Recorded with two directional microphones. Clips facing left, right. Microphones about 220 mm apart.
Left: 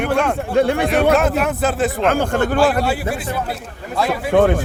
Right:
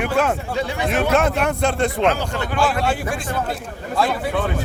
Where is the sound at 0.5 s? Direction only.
55° left (ahead or behind).